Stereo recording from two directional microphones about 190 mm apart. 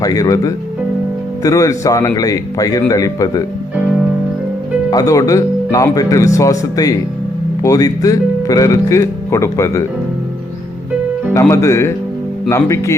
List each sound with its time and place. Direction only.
0.0 s speech: 20° left (ahead or behind)
4.9 s speech: 20° left (ahead or behind)
11.3 s speech: 15° left (ahead or behind)